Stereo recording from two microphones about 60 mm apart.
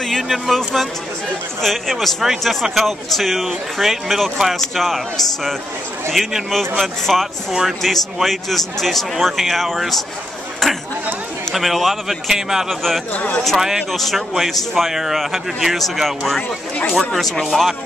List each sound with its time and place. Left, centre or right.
0.0 s speech: centre
13.1 s speech: left
13.6 s speech: centre
16.4 s speech: centre
17.1 s speech: centre